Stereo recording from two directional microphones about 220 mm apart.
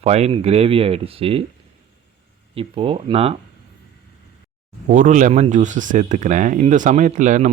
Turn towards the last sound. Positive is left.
turn(degrees=-35)  # may be behind; listen again after turning